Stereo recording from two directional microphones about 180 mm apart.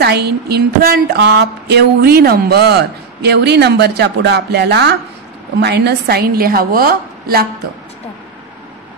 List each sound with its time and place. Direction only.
0.0 s a woman's voice: 65° right (ahead or behind)